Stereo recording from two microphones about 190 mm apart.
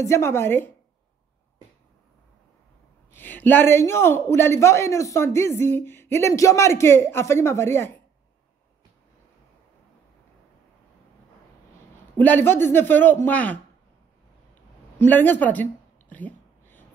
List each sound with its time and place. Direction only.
0.0 s a man's voice: 15° left (ahead or behind)
3.1 s a man's voice: 10° left (ahead or behind)
12.2 s a man's voice: 10° left (ahead or behind)
15.0 s a sound: 10° left (ahead or behind)